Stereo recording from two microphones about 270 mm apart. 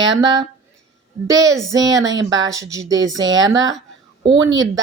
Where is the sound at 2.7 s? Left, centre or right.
Centre.